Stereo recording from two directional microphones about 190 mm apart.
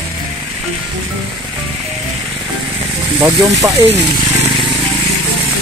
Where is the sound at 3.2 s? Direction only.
10° right (ahead or behind).